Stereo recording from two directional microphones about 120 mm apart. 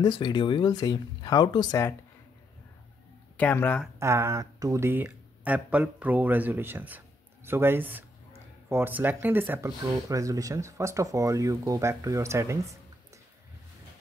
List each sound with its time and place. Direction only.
0.0 s speech: 40° left (ahead or behind)
3.3 s speech: 15° left (ahead or behind)
4.0 s speech: 25° right (ahead or behind)